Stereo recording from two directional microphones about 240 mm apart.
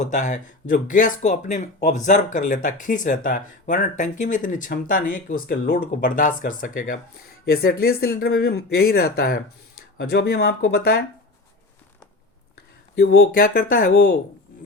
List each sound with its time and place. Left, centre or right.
0.0 s speech: left
13.0 s speech: left